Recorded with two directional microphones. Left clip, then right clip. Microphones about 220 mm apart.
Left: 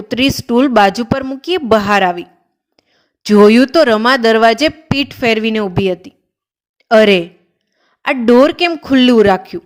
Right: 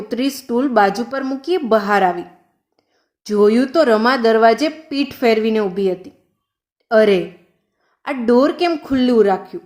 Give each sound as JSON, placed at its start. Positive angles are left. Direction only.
{"t": 0.1, "sound": "a woman's voice", "side_deg": 40}
{"t": 7.8, "sound": "a sound", "side_deg": 35}
{"t": 8.3, "sound": "a woman's voice", "side_deg": 40}